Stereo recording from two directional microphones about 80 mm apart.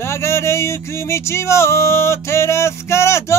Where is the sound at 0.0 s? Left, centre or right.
Left.